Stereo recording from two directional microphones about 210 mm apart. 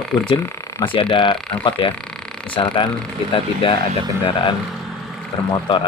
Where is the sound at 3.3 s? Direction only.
25° left (ahead or behind).